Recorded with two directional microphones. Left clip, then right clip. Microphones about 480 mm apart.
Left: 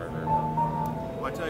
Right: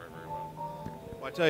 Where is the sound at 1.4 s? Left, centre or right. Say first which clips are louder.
Right 10 dB; right.